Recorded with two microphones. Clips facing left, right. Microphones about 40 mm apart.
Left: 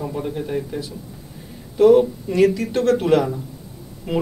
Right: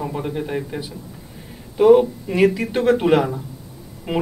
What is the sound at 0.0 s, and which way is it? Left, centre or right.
A man's voice, right.